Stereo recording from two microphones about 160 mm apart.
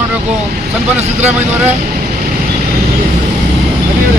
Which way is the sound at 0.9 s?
45° right (ahead or behind).